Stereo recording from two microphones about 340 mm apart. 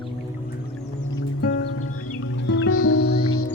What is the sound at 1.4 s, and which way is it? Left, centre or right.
Music, left.